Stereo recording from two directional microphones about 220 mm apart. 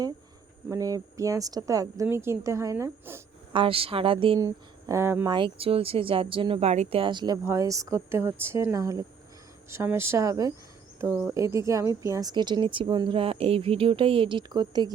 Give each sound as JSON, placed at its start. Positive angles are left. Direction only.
{"t": 0.7, "sound": "speech", "side_deg": -15}
{"t": 3.5, "sound": "speech", "side_deg": -25}
{"t": 5.3, "sound": "speech", "side_deg": -25}